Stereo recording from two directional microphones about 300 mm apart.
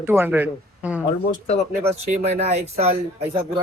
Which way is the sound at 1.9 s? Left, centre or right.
Right.